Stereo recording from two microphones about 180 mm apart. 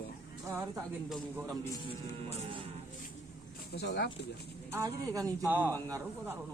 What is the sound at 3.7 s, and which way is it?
Speech, 70° left (ahead or behind).